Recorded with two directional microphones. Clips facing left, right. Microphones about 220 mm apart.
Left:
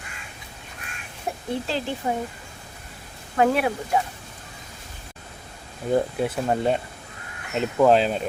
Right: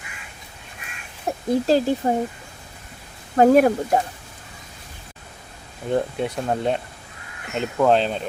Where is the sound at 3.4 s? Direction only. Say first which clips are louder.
Right 7 dB; 45° right (ahead or behind).